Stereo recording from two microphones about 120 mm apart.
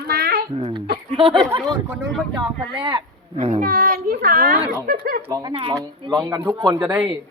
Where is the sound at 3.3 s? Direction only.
65° right (ahead or behind).